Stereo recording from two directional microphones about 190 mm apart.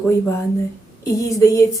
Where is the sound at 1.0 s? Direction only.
15° left (ahead or behind).